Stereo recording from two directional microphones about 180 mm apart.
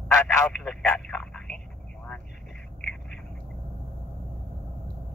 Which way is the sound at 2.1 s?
5° left (ahead or behind).